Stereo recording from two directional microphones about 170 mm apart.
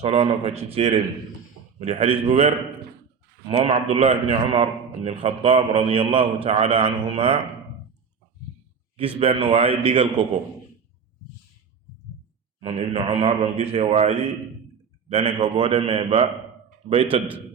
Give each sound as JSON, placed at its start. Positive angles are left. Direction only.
{"t": 0.0, "sound": "a man's voice", "side_deg": -35}
{"t": 3.5, "sound": "a man's voice", "side_deg": -35}
{"t": 9.1, "sound": "a man's voice", "side_deg": -30}
{"t": 12.6, "sound": "a man's voice", "side_deg": -35}